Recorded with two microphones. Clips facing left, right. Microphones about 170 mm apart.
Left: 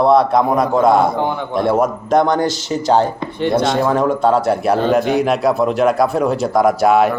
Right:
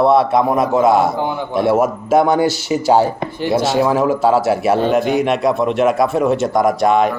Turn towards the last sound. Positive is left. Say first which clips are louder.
# left 1 dB
turn(degrees=5)  # may be behind; listen again after turning